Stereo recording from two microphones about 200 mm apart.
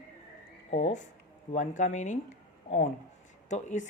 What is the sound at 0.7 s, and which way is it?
Speech, 35° left (ahead or behind).